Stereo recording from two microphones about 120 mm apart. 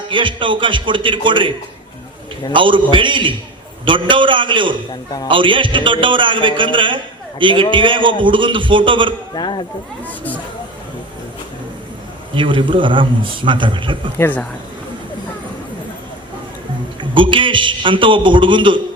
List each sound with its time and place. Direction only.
0.1 s a man's voice: 45° right (ahead or behind)
9.3 s speech: 40° left (ahead or behind)
10.1 s speech: 15° left (ahead or behind)
12.3 s a man's voice: 45° right (ahead or behind)
14.2 s speech: 15° left (ahead or behind)
17.0 s a man's voice: 45° right (ahead or behind)